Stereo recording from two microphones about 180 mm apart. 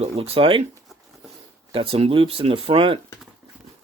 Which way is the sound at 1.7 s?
30° right (ahead or behind).